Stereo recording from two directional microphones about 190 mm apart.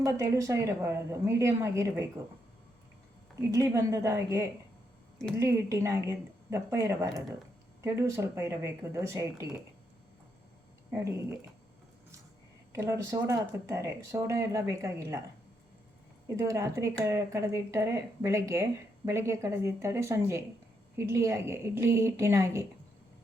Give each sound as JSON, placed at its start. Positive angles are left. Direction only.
{"t": 0.0, "sound": "speech", "side_deg": -15}
{"t": 3.5, "sound": "speech", "side_deg": -15}
{"t": 10.9, "sound": "speech", "side_deg": -15}
{"t": 12.7, "sound": "speech", "side_deg": -15}
{"t": 16.3, "sound": "speech", "side_deg": -15}